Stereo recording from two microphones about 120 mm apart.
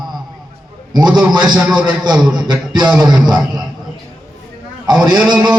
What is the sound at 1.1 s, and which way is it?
Speech, 35° right (ahead or behind).